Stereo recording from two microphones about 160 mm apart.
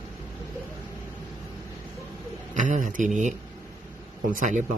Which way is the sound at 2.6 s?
50° right (ahead or behind).